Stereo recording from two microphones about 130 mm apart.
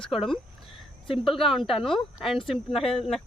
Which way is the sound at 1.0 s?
45° left (ahead or behind).